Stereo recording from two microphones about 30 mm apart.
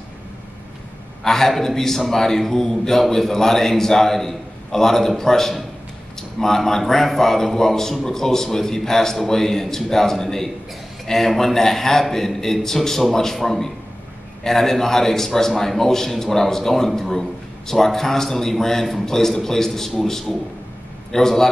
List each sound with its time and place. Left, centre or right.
1.2 s a man's voice: centre